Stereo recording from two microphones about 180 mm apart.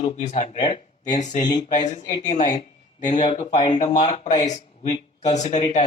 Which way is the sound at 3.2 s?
25° left (ahead or behind).